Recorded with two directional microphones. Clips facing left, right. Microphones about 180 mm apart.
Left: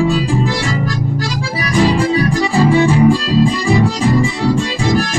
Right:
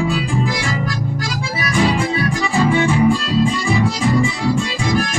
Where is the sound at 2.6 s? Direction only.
35° left (ahead or behind).